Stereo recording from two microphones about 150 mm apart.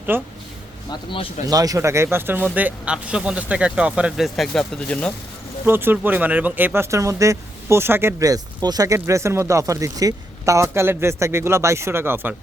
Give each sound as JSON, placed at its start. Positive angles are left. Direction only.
{"t": 0.1, "sound": "speech", "side_deg": -15}
{"t": 1.5, "sound": "speech", "side_deg": -25}
{"t": 5.6, "sound": "speech", "side_deg": -15}